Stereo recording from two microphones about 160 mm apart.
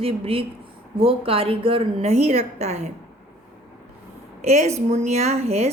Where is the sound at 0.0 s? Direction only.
35° right (ahead or behind).